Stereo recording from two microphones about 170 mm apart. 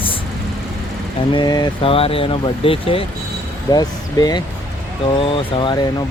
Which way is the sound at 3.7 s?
20° left (ahead or behind).